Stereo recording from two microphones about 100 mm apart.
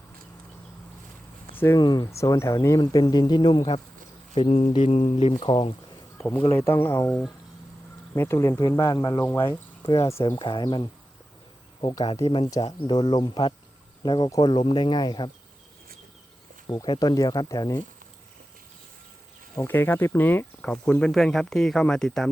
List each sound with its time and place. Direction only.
1.5 s speech: 25° left (ahead or behind)
1.8 s speech: 45° left (ahead or behind)
2.0 s speech: 30° left (ahead or behind); by 3.8 s 50° left (ahead or behind)
4.4 s speech: 70° left (ahead or behind)
4.9 s speech: 90° left
5.2 s speech: 60° left (ahead or behind)
6.5 s speech: 25° left (ahead or behind)
9.2 s speech: 25° left (ahead or behind)
9.5 s speech: 40° left (ahead or behind)
10.2 s speech: 50° left (ahead or behind)
12.0 s speech: 85° left
13.1 s speech: 50° left (ahead or behind)
16.6 s speech: 50° left (ahead or behind)
19.5 s speech: 20° left (ahead or behind); by 22.3 s 5° left (ahead or behind)